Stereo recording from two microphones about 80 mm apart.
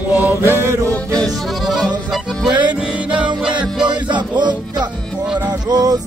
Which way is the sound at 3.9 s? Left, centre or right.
Right.